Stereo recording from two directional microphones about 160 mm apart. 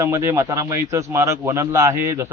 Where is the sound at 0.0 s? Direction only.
20° right (ahead or behind).